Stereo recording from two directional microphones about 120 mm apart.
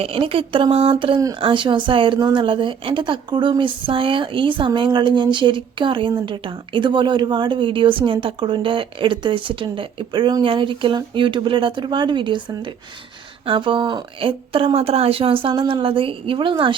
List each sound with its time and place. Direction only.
0.0 s a woman's voice: 50° right (ahead or behind)